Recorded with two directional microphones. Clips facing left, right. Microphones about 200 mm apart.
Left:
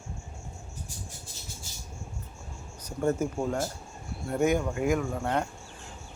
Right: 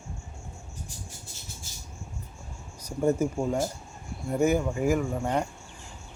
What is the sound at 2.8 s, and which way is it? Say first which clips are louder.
Speech: right 3 dB; 10° right (ahead or behind).